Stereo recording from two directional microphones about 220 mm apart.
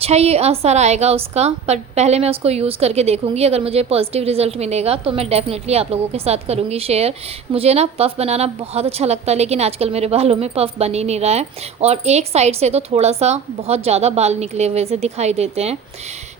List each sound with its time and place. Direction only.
0.0 s a woman's voice: 30° right (ahead or behind)